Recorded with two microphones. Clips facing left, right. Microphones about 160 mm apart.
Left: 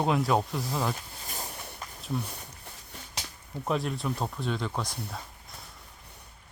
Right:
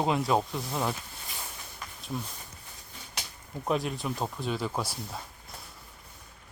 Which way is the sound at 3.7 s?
Centre (ahead or behind).